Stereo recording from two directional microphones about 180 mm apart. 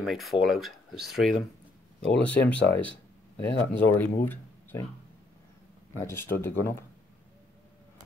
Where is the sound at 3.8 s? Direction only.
10° left (ahead or behind).